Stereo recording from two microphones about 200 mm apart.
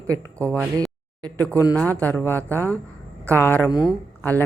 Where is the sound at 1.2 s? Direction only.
5° left (ahead or behind).